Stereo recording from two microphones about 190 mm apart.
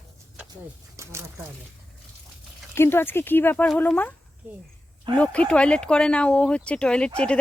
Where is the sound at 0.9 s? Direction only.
15° right (ahead or behind).